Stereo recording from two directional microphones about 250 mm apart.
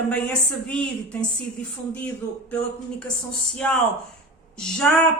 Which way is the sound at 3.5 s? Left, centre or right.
Centre.